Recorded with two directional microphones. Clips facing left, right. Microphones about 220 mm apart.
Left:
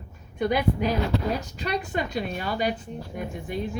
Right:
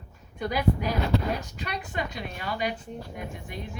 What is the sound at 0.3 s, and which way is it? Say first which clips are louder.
Speech: left 3 dB; 25° left (ahead or behind).